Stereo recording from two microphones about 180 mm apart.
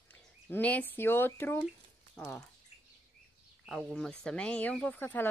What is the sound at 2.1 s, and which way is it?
Speech, 5° left (ahead or behind).